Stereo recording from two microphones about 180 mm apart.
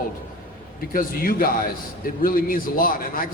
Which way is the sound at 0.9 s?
50° left (ahead or behind).